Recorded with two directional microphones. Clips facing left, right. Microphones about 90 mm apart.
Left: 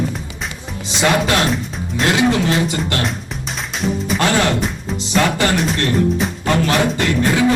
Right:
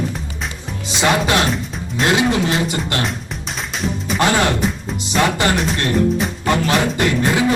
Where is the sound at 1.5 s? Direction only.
Centre (ahead or behind).